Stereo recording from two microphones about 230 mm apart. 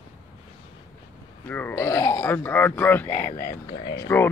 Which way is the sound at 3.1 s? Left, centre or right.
Left.